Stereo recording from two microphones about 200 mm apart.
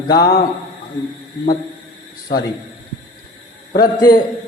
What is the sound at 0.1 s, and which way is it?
Speech, 50° left (ahead or behind).